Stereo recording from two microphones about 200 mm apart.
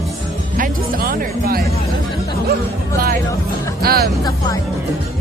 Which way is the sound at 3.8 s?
50° right (ahead or behind).